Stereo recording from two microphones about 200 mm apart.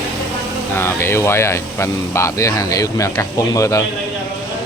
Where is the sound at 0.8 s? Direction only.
10° left (ahead or behind).